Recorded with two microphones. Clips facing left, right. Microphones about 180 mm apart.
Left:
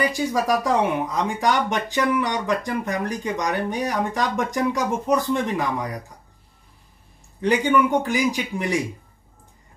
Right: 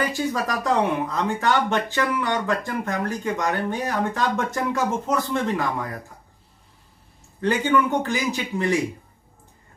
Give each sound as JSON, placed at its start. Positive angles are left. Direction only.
{"t": 0.0, "sound": "speech", "side_deg": 15}
{"t": 7.3, "sound": "speech", "side_deg": 15}